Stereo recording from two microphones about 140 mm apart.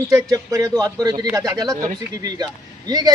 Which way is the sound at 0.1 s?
25° right (ahead or behind).